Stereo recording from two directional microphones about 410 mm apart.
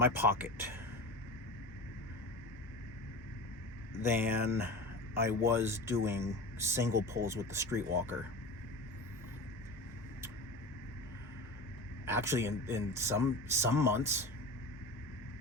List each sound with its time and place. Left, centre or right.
0.0 s speech: centre
4.0 s speech: centre
12.0 s speech: centre